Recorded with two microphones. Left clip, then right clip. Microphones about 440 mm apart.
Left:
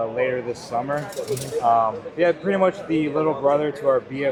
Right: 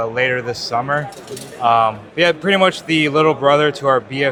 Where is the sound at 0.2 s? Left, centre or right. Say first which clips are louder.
Right 5 dB; right.